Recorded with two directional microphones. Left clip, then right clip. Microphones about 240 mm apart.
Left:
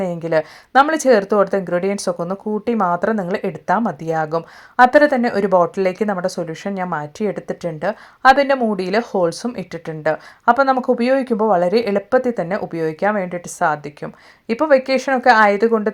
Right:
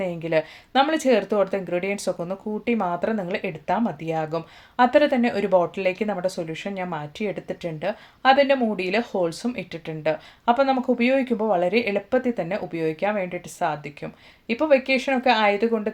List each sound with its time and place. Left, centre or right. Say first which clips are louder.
0.0 s speech: left 5 dB; left